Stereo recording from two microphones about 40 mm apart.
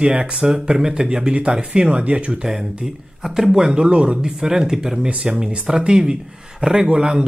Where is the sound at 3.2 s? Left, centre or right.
Centre.